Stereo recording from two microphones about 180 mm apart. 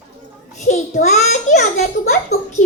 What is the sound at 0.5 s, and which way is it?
A child's voice, 40° left (ahead or behind).